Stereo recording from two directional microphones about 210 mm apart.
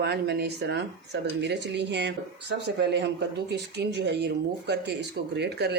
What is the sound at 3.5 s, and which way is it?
Speech, 55° right (ahead or behind).